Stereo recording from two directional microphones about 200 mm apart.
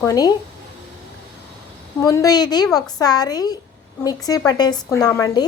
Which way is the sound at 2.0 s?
15° left (ahead or behind).